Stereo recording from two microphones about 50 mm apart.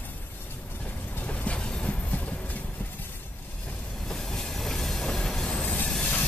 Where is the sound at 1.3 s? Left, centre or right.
Left.